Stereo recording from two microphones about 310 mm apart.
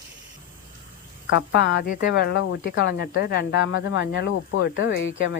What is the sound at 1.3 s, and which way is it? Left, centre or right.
A woman's voice, left.